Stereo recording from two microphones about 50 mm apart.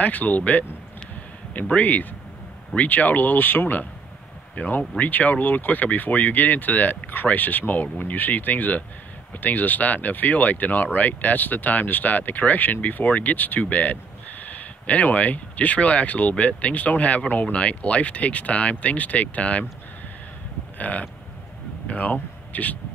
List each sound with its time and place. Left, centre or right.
0.0 s speech: left
20.7 s livestock: left
21.8 s speech: left